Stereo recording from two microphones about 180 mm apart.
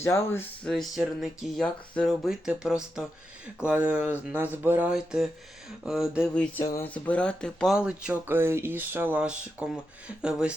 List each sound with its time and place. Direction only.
0.0 s speech: 15° left (ahead or behind)
0.6 s speech: centre (ahead or behind)